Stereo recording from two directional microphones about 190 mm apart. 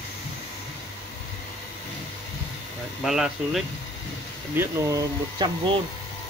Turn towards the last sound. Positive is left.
turn(degrees=-20)  # may be behind; listen again after turning